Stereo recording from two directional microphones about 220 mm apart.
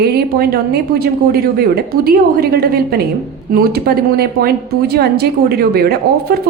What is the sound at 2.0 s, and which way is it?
Speech, 45° right (ahead or behind).